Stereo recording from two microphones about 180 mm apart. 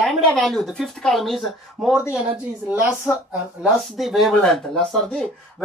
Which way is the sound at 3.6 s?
Centre (ahead or behind).